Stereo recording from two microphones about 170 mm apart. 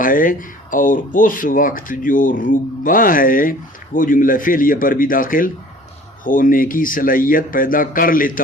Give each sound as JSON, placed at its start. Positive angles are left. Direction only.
{"t": 0.0, "sound": "speech", "side_deg": 55}